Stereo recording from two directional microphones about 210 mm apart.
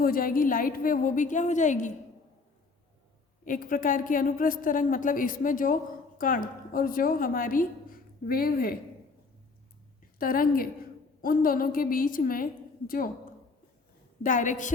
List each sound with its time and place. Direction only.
0.0 s a woman's voice: 45° left (ahead or behind)
3.4 s a woman's voice: 40° left (ahead or behind)
10.2 s a woman's voice: 45° left (ahead or behind)
14.2 s a woman's voice: 40° left (ahead or behind)